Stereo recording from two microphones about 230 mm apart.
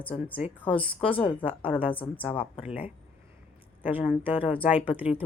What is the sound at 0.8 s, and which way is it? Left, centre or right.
Speech, left.